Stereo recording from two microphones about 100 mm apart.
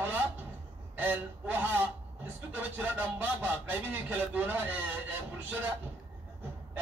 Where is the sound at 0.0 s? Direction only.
25° right (ahead or behind).